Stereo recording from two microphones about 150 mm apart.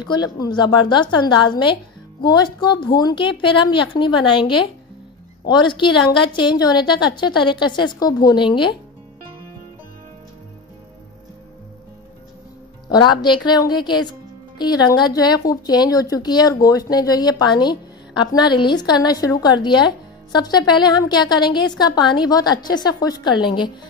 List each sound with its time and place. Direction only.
0.0 s a woman's voice: 30° left (ahead or behind)
12.9 s a woman's voice: 30° left (ahead or behind)